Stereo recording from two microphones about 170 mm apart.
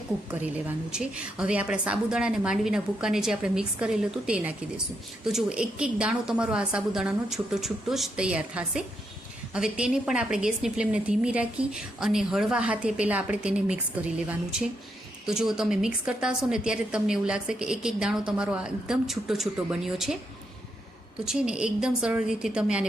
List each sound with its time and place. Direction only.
0.3 s a woman's voice: 10° right (ahead or behind)
21.2 s a woman's voice: 5° right (ahead or behind)